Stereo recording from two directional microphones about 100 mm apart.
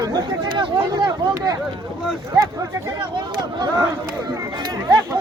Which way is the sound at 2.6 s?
35° right (ahead or behind).